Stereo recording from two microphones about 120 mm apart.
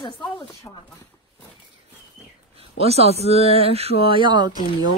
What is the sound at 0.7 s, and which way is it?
Speech, 25° left (ahead or behind).